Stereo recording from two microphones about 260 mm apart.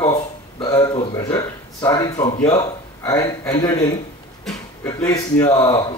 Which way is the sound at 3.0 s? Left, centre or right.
Centre.